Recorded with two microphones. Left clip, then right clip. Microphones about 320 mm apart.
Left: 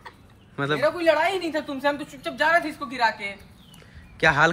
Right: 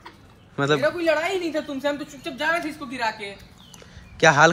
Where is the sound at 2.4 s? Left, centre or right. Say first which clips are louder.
Left 3 dB; centre.